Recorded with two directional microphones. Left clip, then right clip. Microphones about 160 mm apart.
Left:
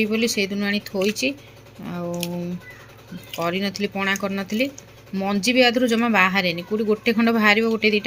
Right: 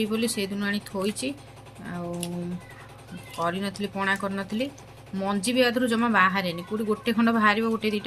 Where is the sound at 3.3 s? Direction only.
20° left (ahead or behind).